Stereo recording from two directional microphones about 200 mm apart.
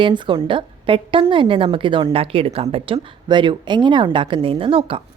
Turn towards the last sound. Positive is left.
turn(degrees=-25)  # may be behind; listen again after turning